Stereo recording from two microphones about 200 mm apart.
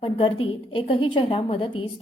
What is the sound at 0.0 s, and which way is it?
A woman's voice, 25° left (ahead or behind).